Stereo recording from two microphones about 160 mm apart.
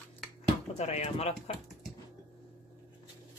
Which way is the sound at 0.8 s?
45° left (ahead or behind).